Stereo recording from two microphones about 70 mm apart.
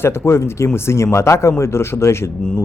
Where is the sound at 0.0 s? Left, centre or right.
Left.